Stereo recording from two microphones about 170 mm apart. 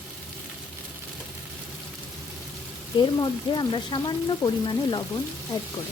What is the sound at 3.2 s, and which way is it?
Speech, 25° left (ahead or behind).